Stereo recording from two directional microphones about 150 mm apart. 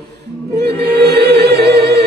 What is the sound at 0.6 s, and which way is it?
Music, 90° right.